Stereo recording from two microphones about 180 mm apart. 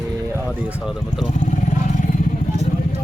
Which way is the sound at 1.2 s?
40° left (ahead or behind).